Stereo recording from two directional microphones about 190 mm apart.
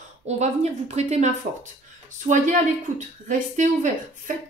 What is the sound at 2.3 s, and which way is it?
Speech, 40° right (ahead or behind).